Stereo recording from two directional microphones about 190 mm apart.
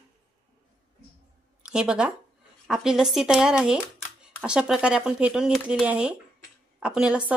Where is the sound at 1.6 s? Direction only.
5° right (ahead or behind).